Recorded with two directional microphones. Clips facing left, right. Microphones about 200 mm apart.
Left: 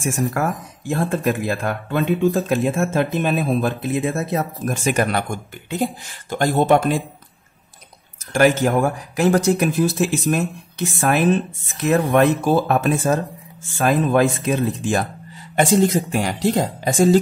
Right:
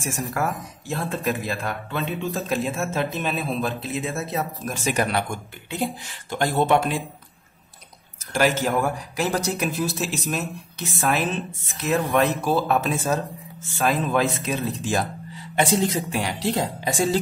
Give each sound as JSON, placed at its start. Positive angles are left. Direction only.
{"t": 0.8, "sound": "speech", "side_deg": 45}
{"t": 6.3, "sound": "speech", "side_deg": 45}
{"t": 8.3, "sound": "speech", "side_deg": 50}